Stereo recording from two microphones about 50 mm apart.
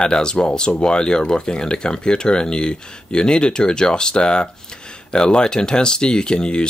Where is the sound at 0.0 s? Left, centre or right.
Centre.